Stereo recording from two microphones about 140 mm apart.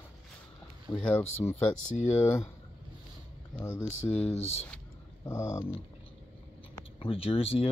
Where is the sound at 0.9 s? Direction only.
10° left (ahead or behind).